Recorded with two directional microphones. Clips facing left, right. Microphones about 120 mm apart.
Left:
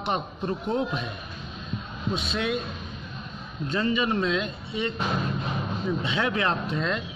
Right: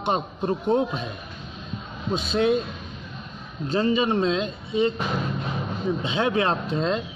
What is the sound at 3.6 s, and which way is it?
Speech, 30° right (ahead or behind).